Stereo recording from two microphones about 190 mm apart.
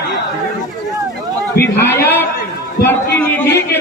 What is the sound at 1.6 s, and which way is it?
Speech, 55° left (ahead or behind).